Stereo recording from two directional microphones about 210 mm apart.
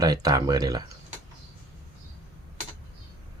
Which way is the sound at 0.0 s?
20° right (ahead or behind).